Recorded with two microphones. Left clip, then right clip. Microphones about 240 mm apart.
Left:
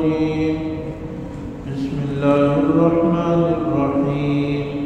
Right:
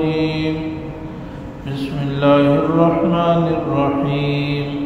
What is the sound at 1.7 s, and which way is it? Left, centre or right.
Mantra, right.